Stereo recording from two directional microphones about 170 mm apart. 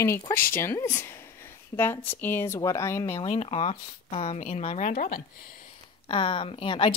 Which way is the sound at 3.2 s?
35° left (ahead or behind).